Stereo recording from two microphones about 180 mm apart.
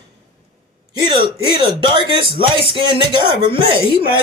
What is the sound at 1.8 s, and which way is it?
Speech, 25° right (ahead or behind).